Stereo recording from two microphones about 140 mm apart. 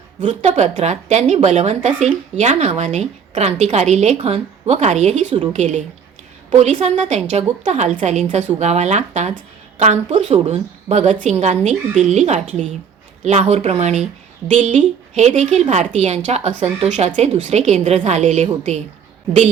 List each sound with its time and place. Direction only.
0.2 s a woman's voice: 55° right (ahead or behind)